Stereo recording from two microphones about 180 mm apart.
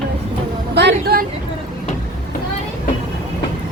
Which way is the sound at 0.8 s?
65° right (ahead or behind).